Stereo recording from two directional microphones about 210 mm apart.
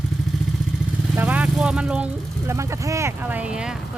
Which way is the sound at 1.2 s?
5° right (ahead or behind).